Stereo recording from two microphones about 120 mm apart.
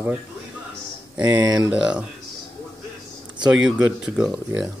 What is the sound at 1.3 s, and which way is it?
Speech, 35° right (ahead or behind).